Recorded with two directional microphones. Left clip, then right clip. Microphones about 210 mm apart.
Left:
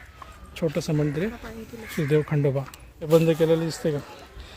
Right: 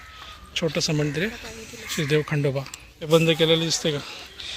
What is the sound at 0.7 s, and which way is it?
Speech, 5° left (ahead or behind).